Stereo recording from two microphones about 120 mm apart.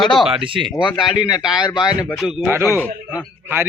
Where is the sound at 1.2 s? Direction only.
35° left (ahead or behind).